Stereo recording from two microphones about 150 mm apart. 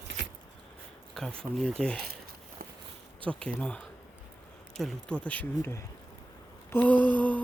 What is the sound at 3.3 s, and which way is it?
Speech, 5° left (ahead or behind).